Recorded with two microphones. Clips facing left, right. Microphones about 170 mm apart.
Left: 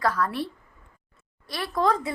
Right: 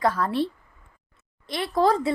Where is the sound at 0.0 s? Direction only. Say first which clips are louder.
Right 3 dB; 25° right (ahead or behind).